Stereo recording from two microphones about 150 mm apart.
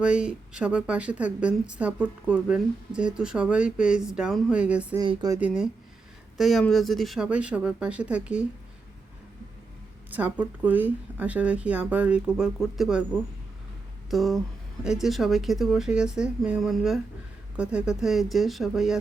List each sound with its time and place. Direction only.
0.0 s speech: 5° right (ahead or behind)
4.9 s speech: 25° right (ahead or behind)
5.4 s speech: 5° right (ahead or behind)
10.1 s speech: 10° right (ahead or behind)
14.1 s speech: centre (ahead or behind)